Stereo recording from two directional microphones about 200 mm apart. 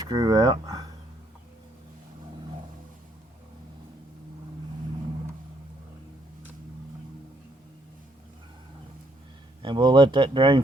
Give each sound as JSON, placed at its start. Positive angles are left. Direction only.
{"t": 0.0, "sound": "speech", "side_deg": -20}
{"t": 9.6, "sound": "speech", "side_deg": -25}